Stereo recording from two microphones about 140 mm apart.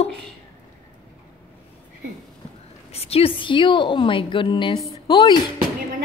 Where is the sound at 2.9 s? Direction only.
45° left (ahead or behind).